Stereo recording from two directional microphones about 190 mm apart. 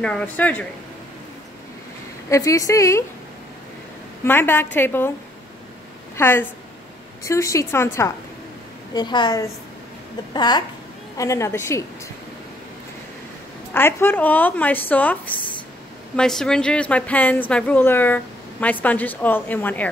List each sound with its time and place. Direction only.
0.0 s speech: 5° left (ahead or behind)
2.2 s speech: 15° left (ahead or behind)
4.2 s speech: 10° left (ahead or behind)
6.1 s a woman's voice: 10° left (ahead or behind)
13.7 s speech: 10° left (ahead or behind)